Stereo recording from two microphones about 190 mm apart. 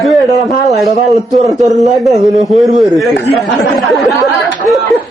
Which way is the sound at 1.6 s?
Centre (ahead or behind).